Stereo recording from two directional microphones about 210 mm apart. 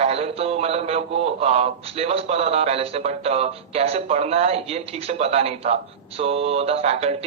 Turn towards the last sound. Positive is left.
turn(degrees=-30)  # may be behind; listen again after turning